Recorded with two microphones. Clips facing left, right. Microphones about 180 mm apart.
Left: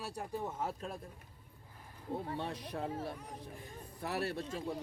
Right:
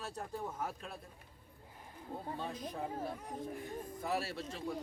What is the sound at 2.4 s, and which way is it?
Speech, 70° left (ahead or behind).